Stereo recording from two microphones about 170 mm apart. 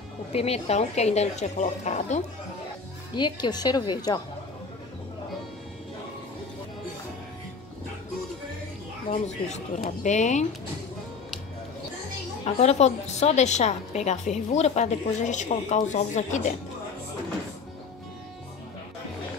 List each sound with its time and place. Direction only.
0.3 s a woman's voice: 35° left (ahead or behind)
3.2 s a woman's voice: 25° left (ahead or behind)
9.1 s a woman's voice: 40° left (ahead or behind)
12.5 s a woman's voice: 40° left (ahead or behind)